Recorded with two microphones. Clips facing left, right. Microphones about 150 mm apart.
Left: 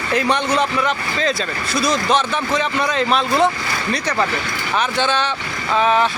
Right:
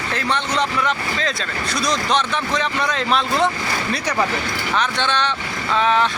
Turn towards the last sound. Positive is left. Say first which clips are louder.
# left 2 dB
turn(degrees=5)  # may be behind; listen again after turning